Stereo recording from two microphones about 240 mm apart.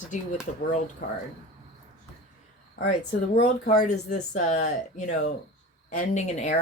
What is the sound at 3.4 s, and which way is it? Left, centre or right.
Speech, left.